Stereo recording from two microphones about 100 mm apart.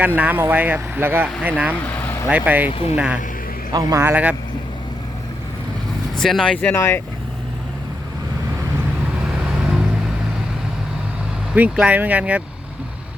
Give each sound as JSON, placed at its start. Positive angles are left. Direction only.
{"t": 0.0, "sound": "speech", "side_deg": -15}
{"t": 1.8, "sound": "vehicle", "side_deg": 25}
{"t": 2.3, "sound": "speech", "side_deg": -15}
{"t": 2.6, "sound": "speech", "side_deg": 70}
{"t": 2.9, "sound": "speech", "side_deg": -10}
{"t": 3.7, "sound": "a man's voice", "side_deg": -40}
{"t": 4.0, "sound": "speech", "side_deg": -15}
{"t": 6.1, "sound": "speech", "side_deg": 5}
{"t": 11.5, "sound": "speech", "side_deg": -15}